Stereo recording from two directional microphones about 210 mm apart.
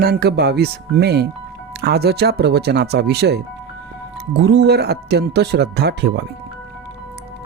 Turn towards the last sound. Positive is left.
turn(degrees=-50)  # may be behind; listen again after turning